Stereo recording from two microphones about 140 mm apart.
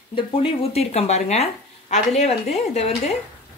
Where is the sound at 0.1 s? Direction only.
40° left (ahead or behind).